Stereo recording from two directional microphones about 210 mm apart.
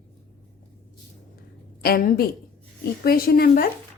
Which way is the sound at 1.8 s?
45° left (ahead or behind).